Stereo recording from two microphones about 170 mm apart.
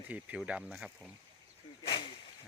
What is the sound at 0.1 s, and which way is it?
Speech, 10° right (ahead or behind).